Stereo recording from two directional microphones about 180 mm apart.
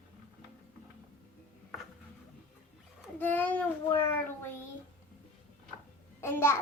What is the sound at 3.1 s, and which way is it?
Child singing, 10° left (ahead or behind).